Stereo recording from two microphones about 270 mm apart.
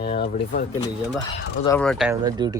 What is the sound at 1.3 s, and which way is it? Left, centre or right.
Speech, centre.